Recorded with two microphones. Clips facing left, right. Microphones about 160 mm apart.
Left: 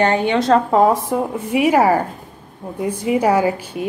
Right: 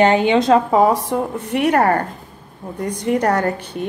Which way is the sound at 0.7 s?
Centre (ahead or behind).